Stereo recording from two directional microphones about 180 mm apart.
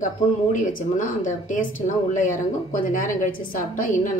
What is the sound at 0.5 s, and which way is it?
A woman's voice, 45° left (ahead or behind).